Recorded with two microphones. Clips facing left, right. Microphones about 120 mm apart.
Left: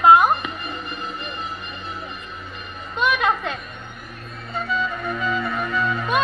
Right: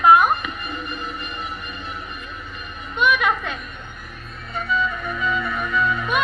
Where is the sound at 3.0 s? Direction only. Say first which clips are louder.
Right 1 dB; 30° left (ahead or behind).